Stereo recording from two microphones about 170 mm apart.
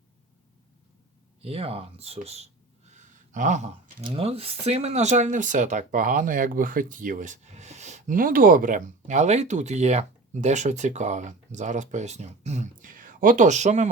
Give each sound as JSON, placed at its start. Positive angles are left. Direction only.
{"t": 1.4, "sound": "speech", "side_deg": -35}
{"t": 2.9, "sound": "a sound", "side_deg": -45}
{"t": 4.0, "sound": "speech", "side_deg": -35}